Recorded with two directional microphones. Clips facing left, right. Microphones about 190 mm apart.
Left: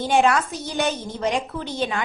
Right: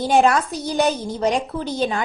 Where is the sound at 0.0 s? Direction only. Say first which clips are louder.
Right 2 dB; 40° right (ahead or behind).